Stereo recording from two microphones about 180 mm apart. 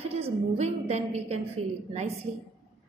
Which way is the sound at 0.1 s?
35° right (ahead or behind).